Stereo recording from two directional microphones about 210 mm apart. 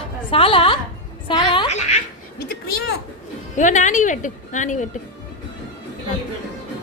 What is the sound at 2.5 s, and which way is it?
Speech, 50° left (ahead or behind).